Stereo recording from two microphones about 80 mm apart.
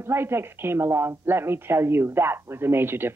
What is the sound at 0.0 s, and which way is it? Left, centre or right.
A woman's voice, right.